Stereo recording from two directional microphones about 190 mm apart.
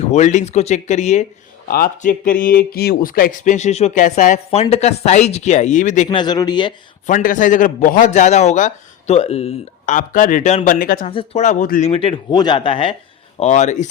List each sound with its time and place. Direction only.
0.0 s speech: 40° left (ahead or behind)
1.6 s speech: 50° left (ahead or behind)
6.1 s speech: 25° left (ahead or behind)
7.1 s speech: 45° left (ahead or behind)
11.1 s speech: 30° left (ahead or behind)
13.4 s speech: 40° left (ahead or behind)